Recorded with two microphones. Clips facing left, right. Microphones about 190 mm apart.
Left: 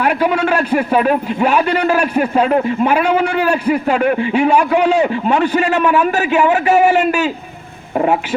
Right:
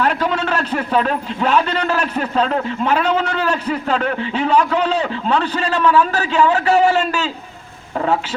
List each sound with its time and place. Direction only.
0.0 s a man's voice: 10° left (ahead or behind)